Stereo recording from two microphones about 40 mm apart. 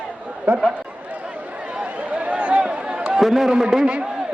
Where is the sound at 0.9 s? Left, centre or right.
Right.